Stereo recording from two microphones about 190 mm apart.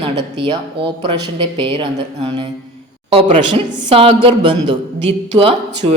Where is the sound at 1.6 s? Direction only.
25° right (ahead or behind).